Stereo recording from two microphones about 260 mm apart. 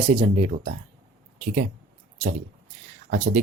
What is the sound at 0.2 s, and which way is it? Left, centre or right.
Speech, right.